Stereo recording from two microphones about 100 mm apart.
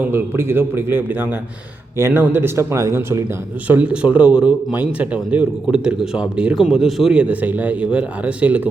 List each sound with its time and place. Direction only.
0.1 s a man's voice: 25° right (ahead or behind)
3.7 s speech: 10° right (ahead or behind)